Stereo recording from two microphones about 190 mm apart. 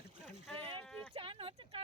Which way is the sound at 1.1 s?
30° right (ahead or behind).